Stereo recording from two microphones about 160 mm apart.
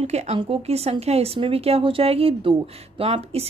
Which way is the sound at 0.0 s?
40° right (ahead or behind).